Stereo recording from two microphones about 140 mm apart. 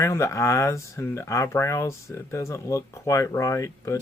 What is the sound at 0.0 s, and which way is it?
Speech, 20° left (ahead or behind).